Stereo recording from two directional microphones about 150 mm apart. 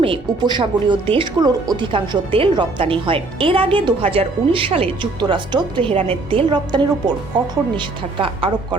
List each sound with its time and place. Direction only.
0.0 s speech: 35° right (ahead or behind)